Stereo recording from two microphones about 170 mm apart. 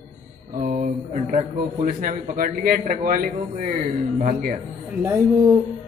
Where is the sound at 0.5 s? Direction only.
55° right (ahead or behind).